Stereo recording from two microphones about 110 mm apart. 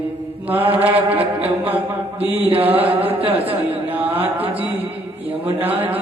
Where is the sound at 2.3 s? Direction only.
60° right (ahead or behind).